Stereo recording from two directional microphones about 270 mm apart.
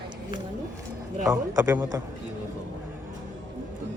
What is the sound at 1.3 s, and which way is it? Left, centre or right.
Speech, centre.